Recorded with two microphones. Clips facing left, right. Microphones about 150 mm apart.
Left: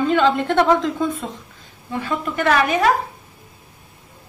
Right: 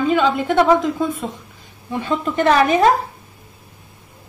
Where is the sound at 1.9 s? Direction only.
20° right (ahead or behind).